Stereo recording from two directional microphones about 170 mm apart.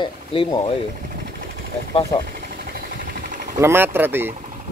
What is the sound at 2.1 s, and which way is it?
Speech, 25° left (ahead or behind).